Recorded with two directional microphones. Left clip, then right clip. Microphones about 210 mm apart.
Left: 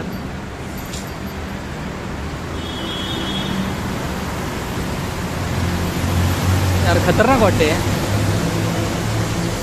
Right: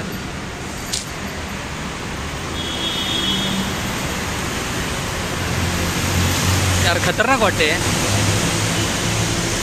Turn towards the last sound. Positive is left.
turn(degrees=-5)  # may be behind; listen again after turning